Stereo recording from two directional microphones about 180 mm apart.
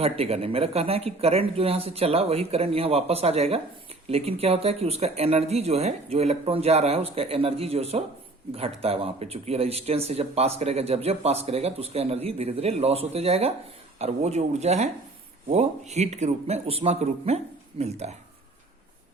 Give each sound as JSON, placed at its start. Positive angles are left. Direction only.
{"t": 0.0, "sound": "speech", "side_deg": -35}